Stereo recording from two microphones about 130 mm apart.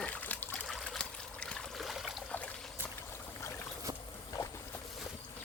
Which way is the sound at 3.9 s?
35° right (ahead or behind).